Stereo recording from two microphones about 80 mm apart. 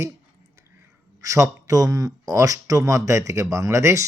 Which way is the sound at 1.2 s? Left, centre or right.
Right.